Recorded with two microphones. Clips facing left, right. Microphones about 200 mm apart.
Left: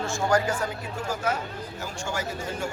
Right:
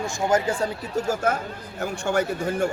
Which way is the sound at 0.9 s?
50° right (ahead or behind).